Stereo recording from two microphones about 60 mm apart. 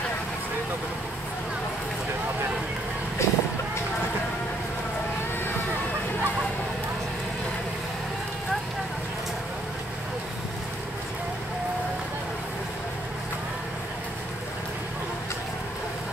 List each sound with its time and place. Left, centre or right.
3.2 s vehicle: left